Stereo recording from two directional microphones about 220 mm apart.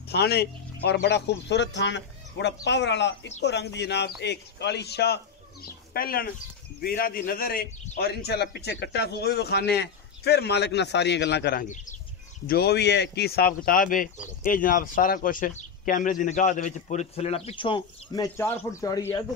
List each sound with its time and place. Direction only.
0.1 s a man's voice: 45° left (ahead or behind)
12.4 s speech: 45° left (ahead or behind); by 19.2 s 15° left (ahead or behind)